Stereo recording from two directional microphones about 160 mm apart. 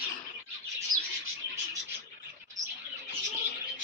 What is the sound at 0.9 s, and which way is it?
Chirp, 55° right (ahead or behind).